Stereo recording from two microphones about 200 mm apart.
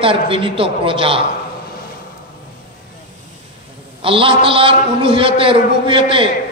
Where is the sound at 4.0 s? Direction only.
25° right (ahead or behind).